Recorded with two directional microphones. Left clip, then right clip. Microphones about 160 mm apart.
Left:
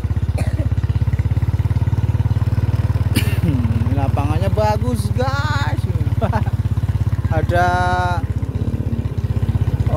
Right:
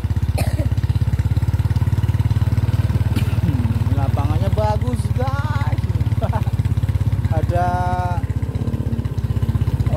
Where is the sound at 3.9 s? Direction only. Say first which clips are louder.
Left 4 dB; 35° left (ahead or behind).